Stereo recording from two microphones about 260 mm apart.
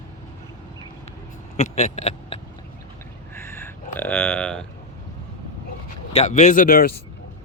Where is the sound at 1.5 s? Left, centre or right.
Left.